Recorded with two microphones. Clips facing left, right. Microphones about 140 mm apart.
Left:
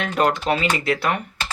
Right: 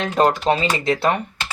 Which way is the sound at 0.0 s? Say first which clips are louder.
Right 3 dB; 25° right (ahead or behind).